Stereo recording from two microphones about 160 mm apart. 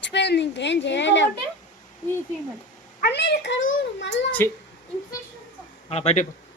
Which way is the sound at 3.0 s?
90° left.